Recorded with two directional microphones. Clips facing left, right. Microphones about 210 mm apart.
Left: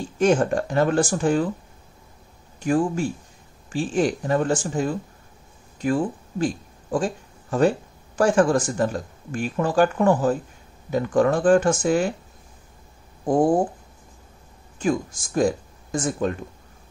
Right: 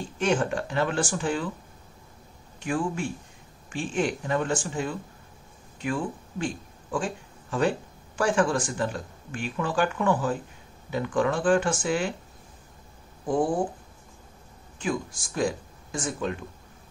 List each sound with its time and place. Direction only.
0.2 s speech: 40° left (ahead or behind)
2.6 s speech: 40° left (ahead or behind)
8.2 s speech: 40° left (ahead or behind)
13.2 s speech: 40° left (ahead or behind)
14.8 s speech: 45° left (ahead or behind)